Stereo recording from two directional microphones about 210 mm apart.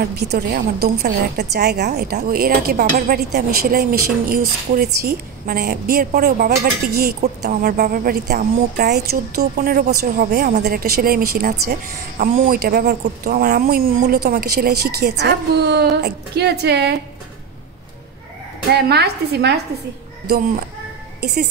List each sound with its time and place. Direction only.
0.0 s speech: 50° right (ahead or behind)
18.7 s speech: 50° right (ahead or behind)
21.2 s speech: 50° right (ahead or behind)